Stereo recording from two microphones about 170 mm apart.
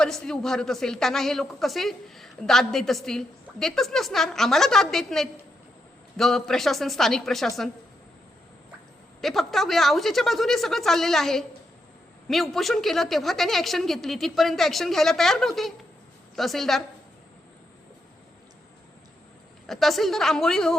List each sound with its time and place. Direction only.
0.0 s a woman's voice: 5° left (ahead or behind)
9.2 s a woman's voice: centre (ahead or behind)
19.6 s a woman's voice: centre (ahead or behind)